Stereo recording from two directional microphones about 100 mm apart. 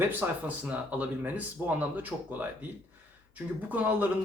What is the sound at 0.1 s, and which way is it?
Speech, 15° right (ahead or behind).